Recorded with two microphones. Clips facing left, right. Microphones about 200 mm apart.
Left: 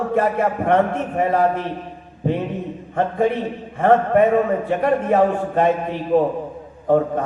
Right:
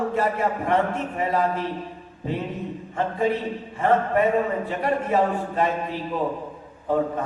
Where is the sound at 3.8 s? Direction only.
50° left (ahead or behind).